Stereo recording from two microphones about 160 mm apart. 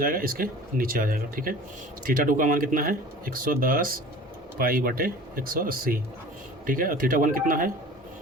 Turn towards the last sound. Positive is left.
turn(degrees=-60)  # may be behind; listen again after turning